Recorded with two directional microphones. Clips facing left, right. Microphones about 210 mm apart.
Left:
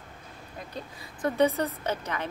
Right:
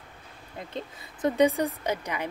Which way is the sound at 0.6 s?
25° right (ahead or behind).